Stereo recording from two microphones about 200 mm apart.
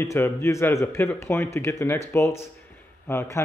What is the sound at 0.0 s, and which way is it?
Speech, 15° left (ahead or behind).